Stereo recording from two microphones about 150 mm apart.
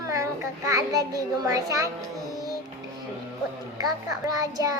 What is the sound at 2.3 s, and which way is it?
Music, 25° right (ahead or behind).